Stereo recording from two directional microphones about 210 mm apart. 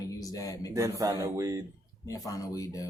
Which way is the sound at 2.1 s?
15° left (ahead or behind).